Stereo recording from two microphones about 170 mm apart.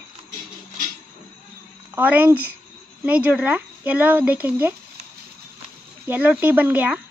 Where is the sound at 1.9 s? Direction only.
10° right (ahead or behind).